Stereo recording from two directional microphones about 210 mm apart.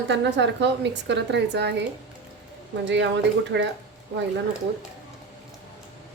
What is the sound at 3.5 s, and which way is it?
Speech, 55° right (ahead or behind).